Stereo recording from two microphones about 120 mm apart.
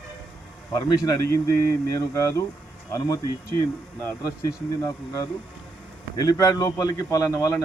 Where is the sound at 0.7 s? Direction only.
30° left (ahead or behind).